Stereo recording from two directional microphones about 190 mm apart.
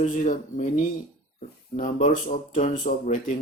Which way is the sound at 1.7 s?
45° left (ahead or behind).